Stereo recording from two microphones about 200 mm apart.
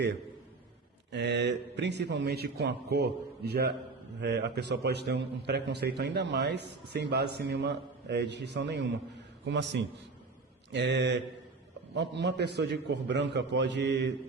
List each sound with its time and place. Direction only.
1.1 s a man's voice: 60° right (ahead or behind)